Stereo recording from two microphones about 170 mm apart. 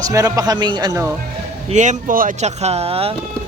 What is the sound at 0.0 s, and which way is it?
Speech, 20° right (ahead or behind).